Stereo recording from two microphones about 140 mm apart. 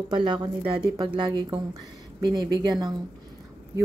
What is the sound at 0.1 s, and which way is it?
A woman's voice, 30° right (ahead or behind).